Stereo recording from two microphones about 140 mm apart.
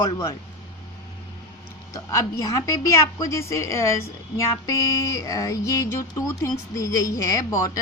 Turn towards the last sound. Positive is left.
turn(degrees=25)  # may be behind; listen again after turning